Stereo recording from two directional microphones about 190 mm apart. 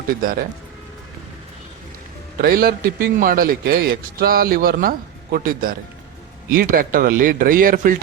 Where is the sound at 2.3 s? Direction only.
50° right (ahead or behind).